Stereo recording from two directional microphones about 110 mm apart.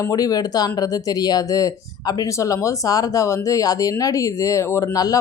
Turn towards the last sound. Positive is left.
turn(degrees=35)  # may be behind; listen again after turning